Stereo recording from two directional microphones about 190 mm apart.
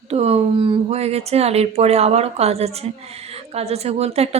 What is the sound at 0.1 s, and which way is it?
Speech, 35° right (ahead or behind).